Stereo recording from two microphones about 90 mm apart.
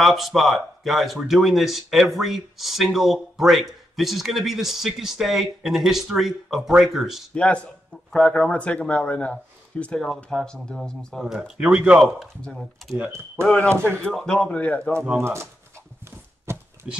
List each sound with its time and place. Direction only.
0.0 s speech: centre (ahead or behind)
7.3 s speech: 15° left (ahead or behind)
11.1 s speech: 5° right (ahead or behind)
13.4 s speech: 5° left (ahead or behind)
13.7 s speech: 30° right (ahead or behind)
14.0 s speech: 5° left (ahead or behind)
15.1 s speech: 30° right (ahead or behind)
16.5 s a sound: 30° right (ahead or behind)
16.8 s speech: 5° right (ahead or behind)